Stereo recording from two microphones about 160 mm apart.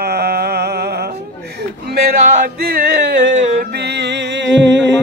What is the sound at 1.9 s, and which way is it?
Music, 75° right (ahead or behind).